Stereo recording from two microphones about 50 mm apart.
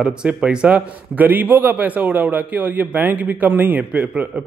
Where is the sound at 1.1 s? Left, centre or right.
Right.